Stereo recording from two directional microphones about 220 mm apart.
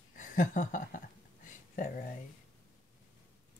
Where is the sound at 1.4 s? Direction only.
35° left (ahead or behind).